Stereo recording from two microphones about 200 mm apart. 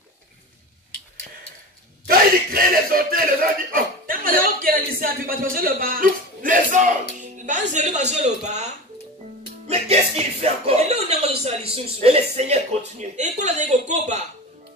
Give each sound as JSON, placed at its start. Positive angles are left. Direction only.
{"t": 2.0, "sound": "a sound", "side_deg": -45}
{"t": 3.7, "sound": "speech", "side_deg": -45}
{"t": 9.7, "sound": "speech", "side_deg": -30}